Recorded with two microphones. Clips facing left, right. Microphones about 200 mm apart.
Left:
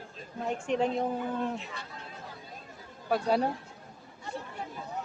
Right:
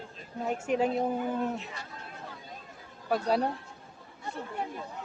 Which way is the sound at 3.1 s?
Centre (ahead or behind).